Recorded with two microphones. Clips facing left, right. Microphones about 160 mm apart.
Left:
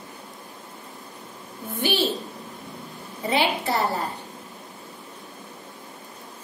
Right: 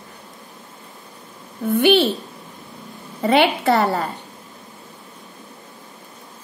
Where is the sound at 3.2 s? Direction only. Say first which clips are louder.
Right 7 dB; 65° right (ahead or behind).